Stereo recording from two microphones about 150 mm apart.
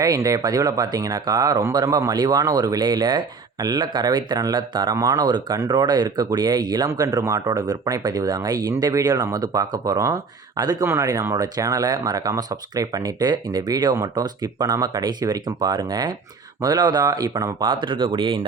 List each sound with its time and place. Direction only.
0.0 s speech: 25° right (ahead or behind)